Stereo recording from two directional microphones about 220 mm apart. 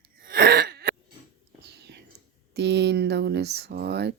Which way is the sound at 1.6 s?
50° right (ahead or behind).